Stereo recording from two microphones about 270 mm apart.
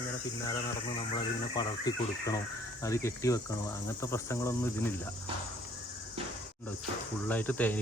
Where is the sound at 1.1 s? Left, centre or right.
Centre.